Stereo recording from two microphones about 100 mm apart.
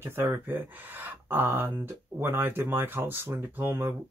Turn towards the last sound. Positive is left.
turn(degrees=-20)  # may be behind; listen again after turning